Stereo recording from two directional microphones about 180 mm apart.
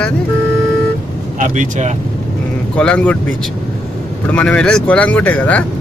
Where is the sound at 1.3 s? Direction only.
45° right (ahead or behind).